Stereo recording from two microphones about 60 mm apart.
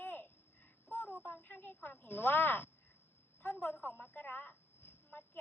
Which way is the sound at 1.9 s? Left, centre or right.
Left.